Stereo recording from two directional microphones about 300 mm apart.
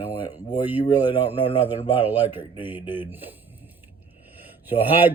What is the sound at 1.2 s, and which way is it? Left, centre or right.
Speech, centre.